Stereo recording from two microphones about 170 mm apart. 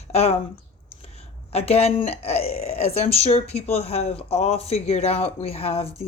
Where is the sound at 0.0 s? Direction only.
40° left (ahead or behind).